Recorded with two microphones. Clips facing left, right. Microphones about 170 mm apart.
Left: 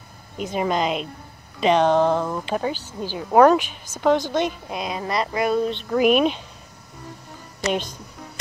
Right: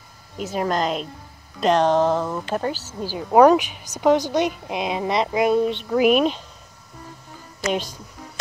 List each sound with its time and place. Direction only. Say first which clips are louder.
0.4 s speech: even; centre (ahead or behind)
3.9 s a woman's voice: right 2 dB; 40° right (ahead or behind)
4.3 s a woman's voice: right 2 dB; 15° right (ahead or behind)
5.9 s speech: even; centre (ahead or behind)